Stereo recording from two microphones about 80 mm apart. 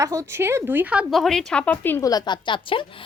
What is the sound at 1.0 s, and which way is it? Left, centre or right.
Speech, centre.